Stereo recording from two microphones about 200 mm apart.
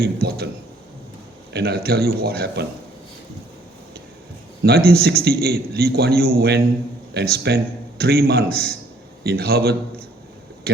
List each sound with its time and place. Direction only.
0.0 s a man's voice: 50° right (ahead or behind)
1.5 s a man's voice: 50° right (ahead or behind)
4.6 s a man's voice: 50° right (ahead or behind)